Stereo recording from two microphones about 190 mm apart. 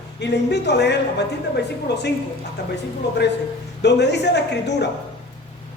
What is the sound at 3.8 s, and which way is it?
Speech, 65° left (ahead or behind).